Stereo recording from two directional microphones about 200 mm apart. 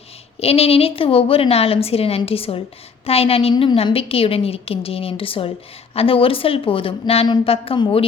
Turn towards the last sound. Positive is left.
turn(degrees=25)  # may be behind; listen again after turning